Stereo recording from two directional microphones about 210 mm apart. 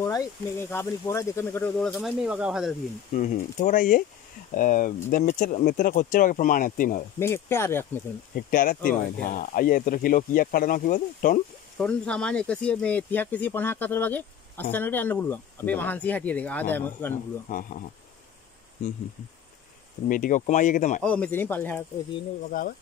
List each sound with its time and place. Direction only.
0.0 s speech: 15° left (ahead or behind); by 2.7 s 5° right (ahead or behind)
3.2 s speech: 40° left (ahead or behind)
7.2 s speech: 10° left (ahead or behind)
8.4 s speech: 40° left (ahead or behind)
11.8 s speech: 5° left (ahead or behind)
17.5 s speech: 40° left (ahead or behind)
18.8 s speech: 35° left (ahead or behind)
20.1 s speech: 40° left (ahead or behind)
21.0 s speech: 5° left (ahead or behind)
22.5 s speech: 40° left (ahead or behind)